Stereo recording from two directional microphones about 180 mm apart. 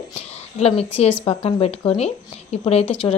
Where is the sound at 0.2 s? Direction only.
35° left (ahead or behind).